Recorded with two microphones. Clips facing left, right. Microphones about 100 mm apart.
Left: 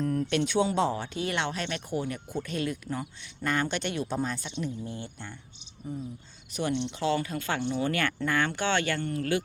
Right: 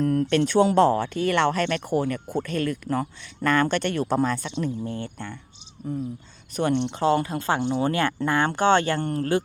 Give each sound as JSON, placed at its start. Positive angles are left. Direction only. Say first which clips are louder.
{"t": 0.0, "sound": "speech", "louder": "right 6 dB", "side_deg": -50}
{"t": 2.4, "sound": "speech", "louder": "right 3 dB", "side_deg": -55}
{"t": 7.3, "sound": "speech", "louder": "right 6 dB", "side_deg": -30}